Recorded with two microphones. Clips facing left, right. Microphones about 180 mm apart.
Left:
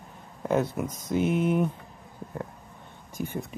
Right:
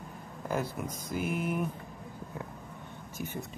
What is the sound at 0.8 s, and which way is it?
Speech, centre (ahead or behind).